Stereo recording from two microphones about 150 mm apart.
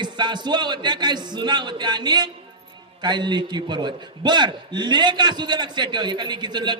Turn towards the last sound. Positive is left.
turn(degrees=-30)  # may be behind; listen again after turning